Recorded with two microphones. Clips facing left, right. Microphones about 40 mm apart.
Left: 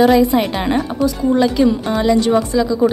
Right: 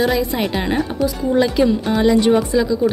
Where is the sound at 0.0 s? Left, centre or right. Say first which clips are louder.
Left 6 dB; centre.